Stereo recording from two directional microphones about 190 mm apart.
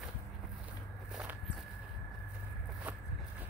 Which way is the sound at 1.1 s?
5° right (ahead or behind).